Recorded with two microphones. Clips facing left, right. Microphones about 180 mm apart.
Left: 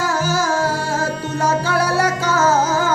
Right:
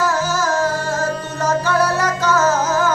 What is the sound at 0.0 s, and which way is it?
Music, 10° left (ahead or behind).